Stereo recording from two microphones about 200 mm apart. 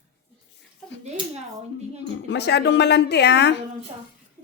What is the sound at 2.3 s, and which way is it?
A woman's voice, 55° left (ahead or behind).